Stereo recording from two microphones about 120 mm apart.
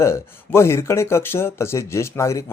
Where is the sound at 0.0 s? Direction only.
20° left (ahead or behind).